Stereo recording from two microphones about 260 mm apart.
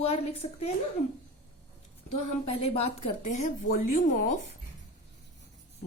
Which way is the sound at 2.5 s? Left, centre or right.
Left.